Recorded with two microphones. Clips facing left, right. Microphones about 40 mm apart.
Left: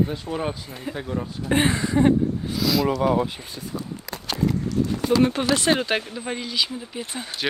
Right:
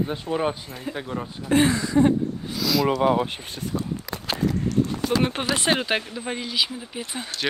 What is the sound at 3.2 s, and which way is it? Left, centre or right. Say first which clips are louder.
Speech: right 1 dB; right.